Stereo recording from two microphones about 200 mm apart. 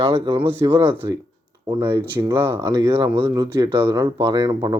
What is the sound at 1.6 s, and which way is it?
Speech, 25° right (ahead or behind).